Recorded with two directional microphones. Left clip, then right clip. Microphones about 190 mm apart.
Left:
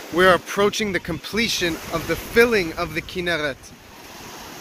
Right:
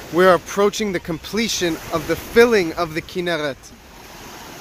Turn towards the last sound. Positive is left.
turn(degrees=-20)  # may be behind; listen again after turning